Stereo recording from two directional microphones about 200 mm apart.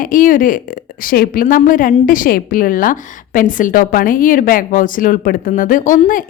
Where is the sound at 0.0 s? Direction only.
40° left (ahead or behind).